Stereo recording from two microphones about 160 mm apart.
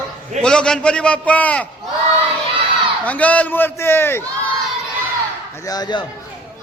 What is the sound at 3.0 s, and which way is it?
Speech, 10° left (ahead or behind).